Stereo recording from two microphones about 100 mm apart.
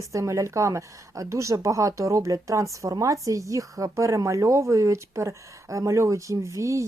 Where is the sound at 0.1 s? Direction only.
30° right (ahead or behind).